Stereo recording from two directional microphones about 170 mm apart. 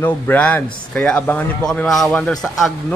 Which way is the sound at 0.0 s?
10° left (ahead or behind).